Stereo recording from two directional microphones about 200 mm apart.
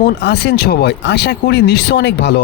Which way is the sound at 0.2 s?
55° left (ahead or behind).